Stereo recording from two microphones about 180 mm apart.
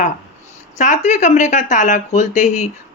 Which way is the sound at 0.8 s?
45° left (ahead or behind).